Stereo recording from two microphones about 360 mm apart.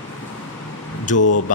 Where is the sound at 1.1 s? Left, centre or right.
Left.